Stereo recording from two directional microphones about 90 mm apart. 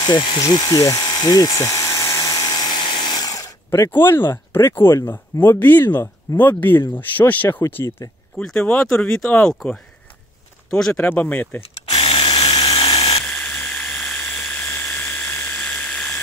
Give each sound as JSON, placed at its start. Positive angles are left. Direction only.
{"t": 0.0, "sound": "speech", "side_deg": 55}
{"t": 0.4, "sound": "electric toothbrush", "side_deg": 40}
{"t": 2.7, "sound": "speech", "side_deg": 60}
{"t": 8.0, "sound": "speech", "side_deg": 40}
{"t": 8.8, "sound": "speech", "side_deg": 5}
{"t": 10.7, "sound": "speech", "side_deg": 5}
{"t": 11.1, "sound": "speech", "side_deg": 20}
{"t": 11.6, "sound": "rub", "side_deg": 90}
{"t": 12.4, "sound": "dental drill", "side_deg": 45}
{"t": 12.9, "sound": "drill", "side_deg": 90}
{"t": 13.2, "sound": "a sound", "side_deg": 10}